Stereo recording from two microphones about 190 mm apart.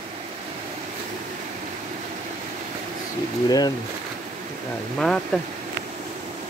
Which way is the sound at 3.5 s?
20° left (ahead or behind).